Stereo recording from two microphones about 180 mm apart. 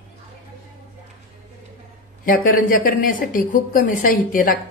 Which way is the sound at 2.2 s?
50° left (ahead or behind).